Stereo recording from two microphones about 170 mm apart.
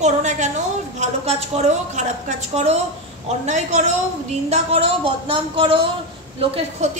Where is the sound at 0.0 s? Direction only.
45° right (ahead or behind).